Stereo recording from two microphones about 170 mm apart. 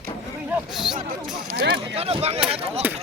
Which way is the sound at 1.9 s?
35° right (ahead or behind).